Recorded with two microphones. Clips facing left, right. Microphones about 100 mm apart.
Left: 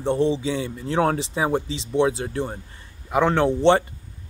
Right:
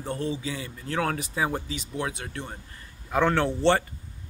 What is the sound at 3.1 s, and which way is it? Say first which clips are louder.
Speech: left 4 dB; 15° left (ahead or behind).